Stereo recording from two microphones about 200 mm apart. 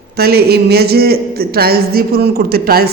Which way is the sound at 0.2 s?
50° right (ahead or behind).